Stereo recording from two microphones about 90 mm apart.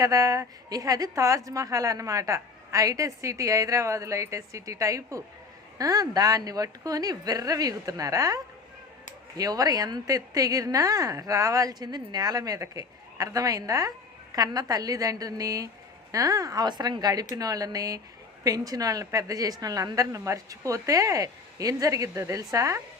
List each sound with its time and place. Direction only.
0.0 s a woman's voice: 40° right (ahead or behind)